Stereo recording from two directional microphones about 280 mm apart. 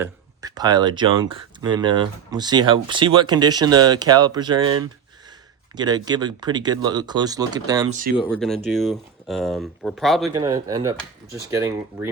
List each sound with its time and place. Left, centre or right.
0.0 s speech: centre
7.9 s speech: right
8.3 s speech: centre
10.3 s speech: centre